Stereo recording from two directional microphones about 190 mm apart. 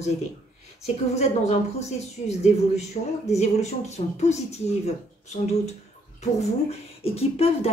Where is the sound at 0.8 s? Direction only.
35° left (ahead or behind).